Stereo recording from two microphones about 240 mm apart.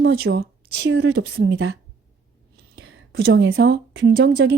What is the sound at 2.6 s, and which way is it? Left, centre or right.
Whispering, right.